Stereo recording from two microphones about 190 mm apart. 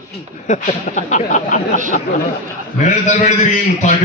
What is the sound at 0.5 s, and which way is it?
A man's voice, 40° left (ahead or behind).